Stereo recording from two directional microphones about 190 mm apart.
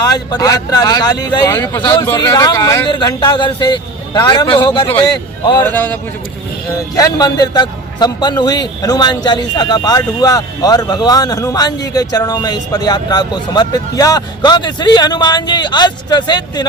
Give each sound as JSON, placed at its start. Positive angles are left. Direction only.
{"t": 0.0, "sound": "a man's voice", "side_deg": 20}
{"t": 5.6, "sound": "a man's voice", "side_deg": 10}